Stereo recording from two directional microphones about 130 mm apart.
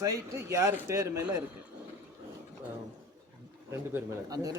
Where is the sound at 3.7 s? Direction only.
25° right (ahead or behind).